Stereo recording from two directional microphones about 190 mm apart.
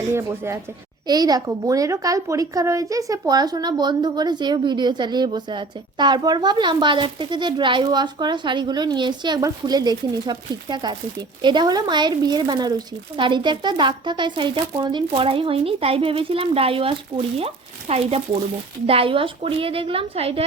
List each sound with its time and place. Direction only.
0.1 s a woman's voice: 15° right (ahead or behind); by 20.4 s 30° right (ahead or behind)